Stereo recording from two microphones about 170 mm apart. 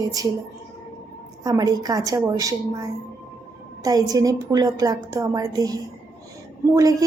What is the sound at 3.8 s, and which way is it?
A woman's voice, 20° right (ahead or behind).